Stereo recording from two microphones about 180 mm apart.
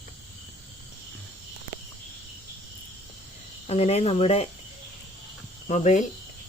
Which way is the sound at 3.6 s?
35° left (ahead or behind).